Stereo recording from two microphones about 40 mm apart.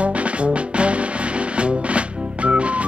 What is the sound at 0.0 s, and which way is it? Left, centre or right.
Music, right.